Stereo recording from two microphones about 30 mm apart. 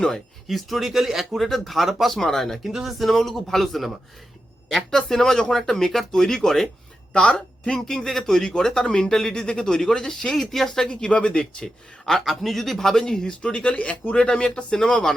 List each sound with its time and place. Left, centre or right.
0.4 s a man's voice: centre
1.2 s speech: centre
2.1 s speech: centre
2.6 s speech: centre
3.1 s speech: centre
4.9 s speech: centre
7.1 s speech: left
7.7 s speech: centre
10.8 s speech: left
12.0 s speech: centre
13.4 s speech: left
14.3 s speech: left